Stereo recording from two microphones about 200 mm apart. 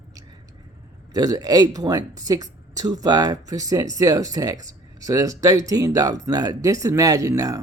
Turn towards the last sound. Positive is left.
turn(degrees=-15)  # may be behind; listen again after turning